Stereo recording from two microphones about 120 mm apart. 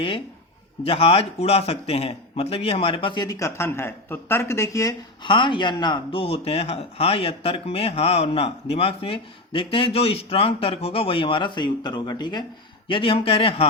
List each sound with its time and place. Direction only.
0.9 s a man's voice: 50° left (ahead or behind)
3.2 s speech: 25° left (ahead or behind)
5.2 s a man's voice: 45° left (ahead or behind)